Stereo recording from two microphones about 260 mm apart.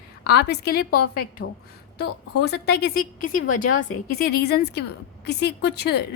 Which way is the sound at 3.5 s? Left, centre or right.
Left.